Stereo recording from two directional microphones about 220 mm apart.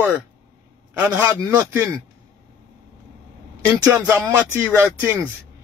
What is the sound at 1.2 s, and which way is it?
Speech, 15° right (ahead or behind).